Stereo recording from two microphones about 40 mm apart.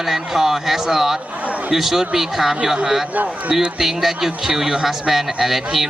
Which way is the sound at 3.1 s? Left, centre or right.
Right.